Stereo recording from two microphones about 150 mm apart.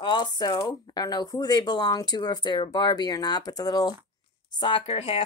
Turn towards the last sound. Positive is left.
turn(degrees=40)  # may be behind; listen again after turning